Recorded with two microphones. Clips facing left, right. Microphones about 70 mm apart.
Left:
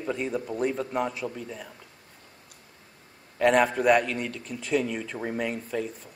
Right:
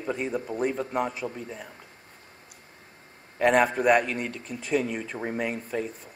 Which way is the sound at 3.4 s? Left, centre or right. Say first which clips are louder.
Even; centre.